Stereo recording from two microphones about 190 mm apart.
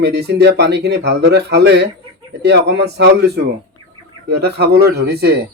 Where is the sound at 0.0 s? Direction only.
60° right (ahead or behind).